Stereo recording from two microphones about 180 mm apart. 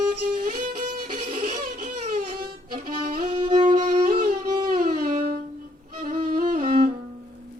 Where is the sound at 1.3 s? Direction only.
35° right (ahead or behind).